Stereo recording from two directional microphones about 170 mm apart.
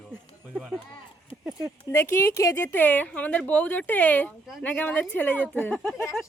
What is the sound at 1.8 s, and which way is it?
Speech, 15° left (ahead or behind).